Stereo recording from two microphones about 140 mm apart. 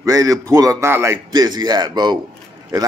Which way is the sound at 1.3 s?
30° right (ahead or behind).